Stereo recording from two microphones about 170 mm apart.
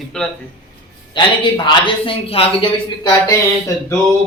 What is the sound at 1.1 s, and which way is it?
Speech, 30° left (ahead or behind).